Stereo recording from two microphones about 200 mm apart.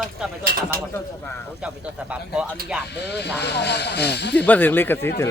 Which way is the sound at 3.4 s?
55° left (ahead or behind).